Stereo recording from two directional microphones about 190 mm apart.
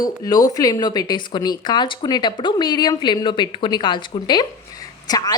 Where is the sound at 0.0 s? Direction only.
20° left (ahead or behind).